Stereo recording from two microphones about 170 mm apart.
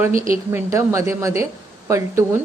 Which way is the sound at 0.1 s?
50° right (ahead or behind).